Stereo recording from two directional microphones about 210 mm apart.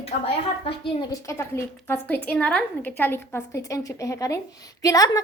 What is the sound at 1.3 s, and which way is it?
A woman's voice, 10° left (ahead or behind).